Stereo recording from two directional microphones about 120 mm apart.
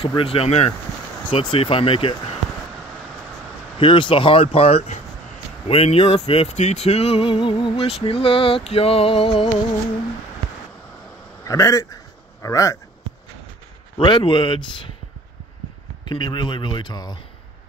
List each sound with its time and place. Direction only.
0.2 s speech: 50° left (ahead or behind)
1.3 s speech: 45° left (ahead or behind)
3.8 s speech: 45° left (ahead or behind)
11.4 s a man's voice: 30° left (ahead or behind)
13.9 s speech: 45° left (ahead or behind)
16.1 s speech: 35° left (ahead or behind)